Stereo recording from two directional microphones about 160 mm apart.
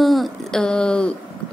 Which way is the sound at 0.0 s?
Centre (ahead or behind).